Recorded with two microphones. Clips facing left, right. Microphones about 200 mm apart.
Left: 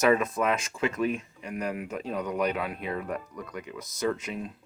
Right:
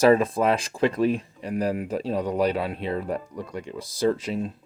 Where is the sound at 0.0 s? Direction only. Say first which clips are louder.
Right 5 dB; 30° right (ahead or behind).